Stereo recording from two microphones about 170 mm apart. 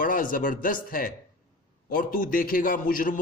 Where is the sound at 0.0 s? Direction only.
55° left (ahead or behind).